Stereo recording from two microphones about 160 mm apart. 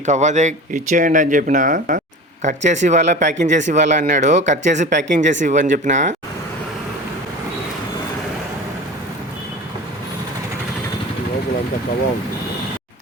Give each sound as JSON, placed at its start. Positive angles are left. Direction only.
{"t": 0.0, "sound": "speech", "side_deg": -50}